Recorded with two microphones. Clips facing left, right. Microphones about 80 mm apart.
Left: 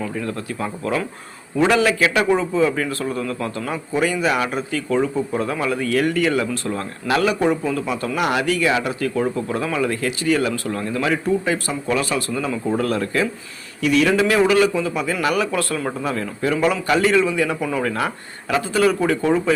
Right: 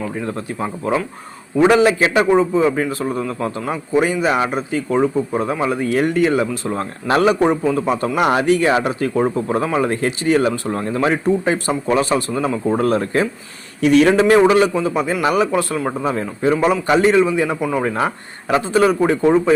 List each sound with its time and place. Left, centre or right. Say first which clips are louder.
0.0 s speech: right 2 dB; right
7.4 s speech: right 3 dB; right
7.9 s speech: right 5 dB; right